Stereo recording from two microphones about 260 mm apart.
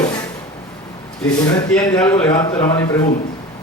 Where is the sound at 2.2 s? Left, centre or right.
Centre.